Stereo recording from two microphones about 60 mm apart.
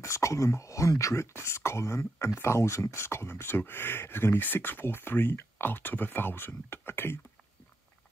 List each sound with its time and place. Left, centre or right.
0.0 s speech: left